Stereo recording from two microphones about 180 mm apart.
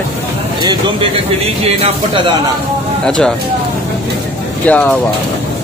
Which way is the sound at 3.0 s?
5° left (ahead or behind).